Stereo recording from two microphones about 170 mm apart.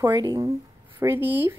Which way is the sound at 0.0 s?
20° right (ahead or behind).